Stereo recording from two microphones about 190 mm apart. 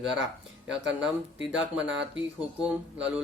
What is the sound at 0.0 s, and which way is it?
Speech, 5° right (ahead or behind).